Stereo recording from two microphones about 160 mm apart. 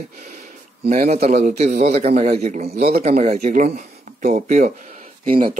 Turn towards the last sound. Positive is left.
turn(degrees=-35)  # may be behind; listen again after turning